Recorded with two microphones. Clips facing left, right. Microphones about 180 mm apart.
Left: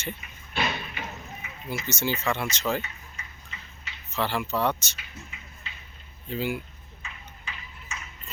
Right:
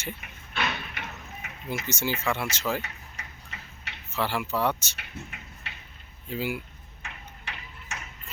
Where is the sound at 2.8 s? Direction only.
70° right (ahead or behind).